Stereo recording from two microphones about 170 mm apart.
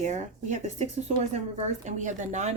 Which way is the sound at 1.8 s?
45° right (ahead or behind).